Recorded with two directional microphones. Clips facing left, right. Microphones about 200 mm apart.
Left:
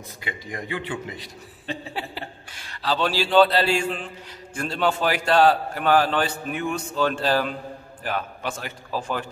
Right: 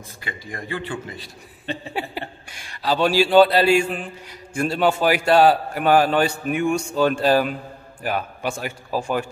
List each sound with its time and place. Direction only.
0.2 s a man's voice: 20° left (ahead or behind)
2.0 s a man's voice: 15° right (ahead or behind)